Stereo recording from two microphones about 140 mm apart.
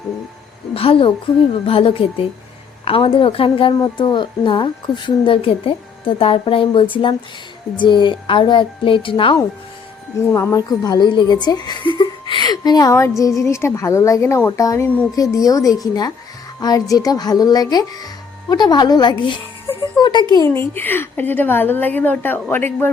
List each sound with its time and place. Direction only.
0.7 s a woman's voice: 40° left (ahead or behind)
10.2 s a woman's voice: 20° left (ahead or behind)
20.6 s a woman's voice: 15° left (ahead or behind)